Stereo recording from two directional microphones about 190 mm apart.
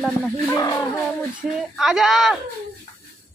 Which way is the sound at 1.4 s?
5° right (ahead or behind).